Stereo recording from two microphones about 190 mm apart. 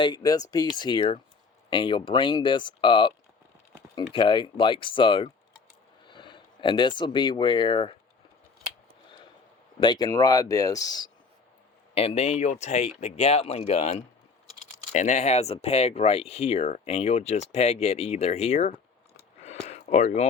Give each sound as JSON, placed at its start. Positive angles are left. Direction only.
{"t": 0.0, "sound": "speech", "side_deg": 20}
{"t": 4.1, "sound": "speech", "side_deg": 25}
{"t": 9.8, "sound": "speech", "side_deg": 20}
{"t": 11.9, "sound": "speech", "side_deg": 30}
{"t": 19.6, "sound": "a sound", "side_deg": 35}